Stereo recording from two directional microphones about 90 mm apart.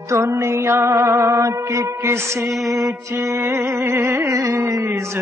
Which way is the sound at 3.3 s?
30° right (ahead or behind).